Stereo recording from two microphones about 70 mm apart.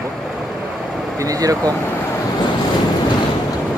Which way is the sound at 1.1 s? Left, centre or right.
Right.